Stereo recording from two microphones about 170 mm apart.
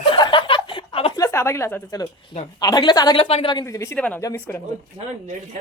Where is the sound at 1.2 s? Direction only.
15° left (ahead or behind).